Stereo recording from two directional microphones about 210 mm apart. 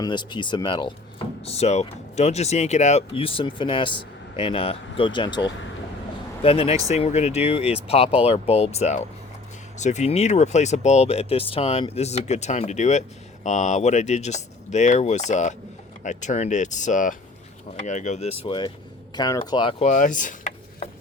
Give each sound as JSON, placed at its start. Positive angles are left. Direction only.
{"t": 0.0, "sound": "speech", "side_deg": 20}
{"t": 6.4, "sound": "speech", "side_deg": 30}
{"t": 19.8, "sound": "a sound", "side_deg": 35}